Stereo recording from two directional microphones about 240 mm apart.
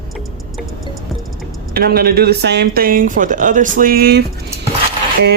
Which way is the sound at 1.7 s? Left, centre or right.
Right.